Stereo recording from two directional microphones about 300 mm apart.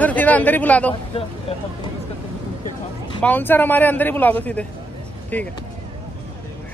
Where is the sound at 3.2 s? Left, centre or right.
Centre.